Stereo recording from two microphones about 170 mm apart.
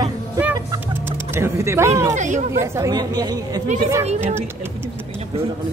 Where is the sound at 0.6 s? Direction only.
15° right (ahead or behind).